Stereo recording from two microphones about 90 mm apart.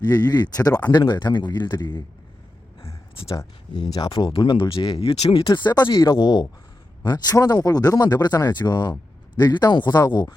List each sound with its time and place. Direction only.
0.1 s speech: 50° left (ahead or behind)
3.7 s speech: 50° left (ahead or behind)
4.3 s speech: 75° left (ahead or behind)
5.5 s speech: 50° left (ahead or behind)
6.1 s speech: 60° left (ahead or behind)